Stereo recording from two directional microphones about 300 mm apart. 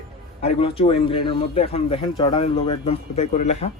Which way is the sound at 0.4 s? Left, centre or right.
Centre.